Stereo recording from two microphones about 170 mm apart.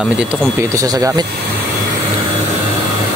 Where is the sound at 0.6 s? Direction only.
20° right (ahead or behind).